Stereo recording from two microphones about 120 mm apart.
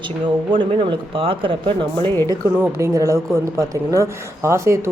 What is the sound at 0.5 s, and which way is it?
Speech, 45° right (ahead or behind).